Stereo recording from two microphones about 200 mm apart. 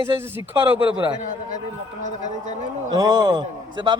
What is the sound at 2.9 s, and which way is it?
A man's voice, 15° right (ahead or behind).